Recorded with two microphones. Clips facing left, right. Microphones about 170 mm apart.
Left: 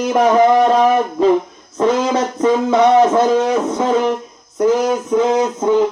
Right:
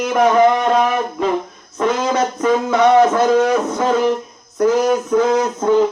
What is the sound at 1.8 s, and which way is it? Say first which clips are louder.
Speech: left 2 dB; 30° left (ahead or behind).